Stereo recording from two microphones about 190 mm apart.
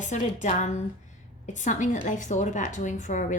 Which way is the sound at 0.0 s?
40° left (ahead or behind).